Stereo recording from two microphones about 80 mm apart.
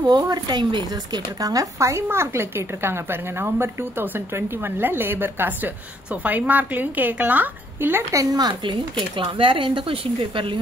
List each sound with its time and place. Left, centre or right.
0.3 s a woman's voice: right
1.4 s a woman's voice: right
8.1 s speech: right